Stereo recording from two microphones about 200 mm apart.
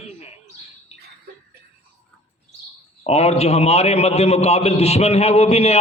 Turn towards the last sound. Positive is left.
turn(degrees=30)  # may be behind; listen again after turning